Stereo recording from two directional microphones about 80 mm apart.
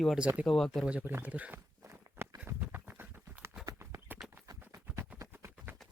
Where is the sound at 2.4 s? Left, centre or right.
Right.